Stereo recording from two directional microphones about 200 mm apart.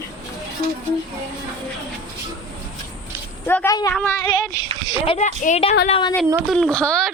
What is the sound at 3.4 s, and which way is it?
Speech, 10° left (ahead or behind).